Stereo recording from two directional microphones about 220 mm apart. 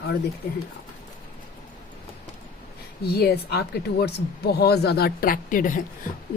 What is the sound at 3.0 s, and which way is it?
A woman's voice, 45° left (ahead or behind).